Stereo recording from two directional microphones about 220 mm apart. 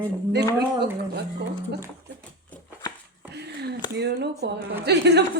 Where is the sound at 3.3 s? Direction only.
50° right (ahead or behind).